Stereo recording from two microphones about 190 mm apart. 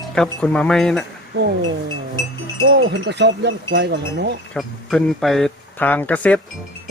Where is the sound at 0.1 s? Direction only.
5° left (ahead or behind).